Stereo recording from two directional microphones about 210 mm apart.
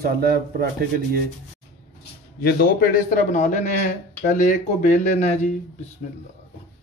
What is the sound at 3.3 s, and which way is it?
Speech, 35° left (ahead or behind).